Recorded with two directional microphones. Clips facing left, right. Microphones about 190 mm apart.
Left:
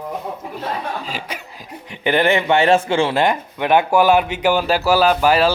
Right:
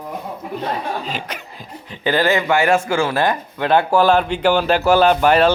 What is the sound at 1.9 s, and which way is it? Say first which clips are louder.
A man's voice: left 1 dB; 20° left (ahead or behind).